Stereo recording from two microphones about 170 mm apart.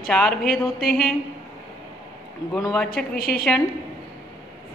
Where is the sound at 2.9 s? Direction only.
60° left (ahead or behind).